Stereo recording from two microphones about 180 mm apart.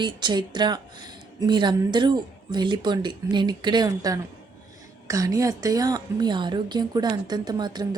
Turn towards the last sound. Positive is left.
turn(degrees=-20)  # may be behind; listen again after turning